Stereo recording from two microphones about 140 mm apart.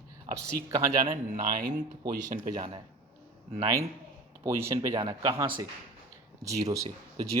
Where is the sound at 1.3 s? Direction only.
70° right (ahead or behind).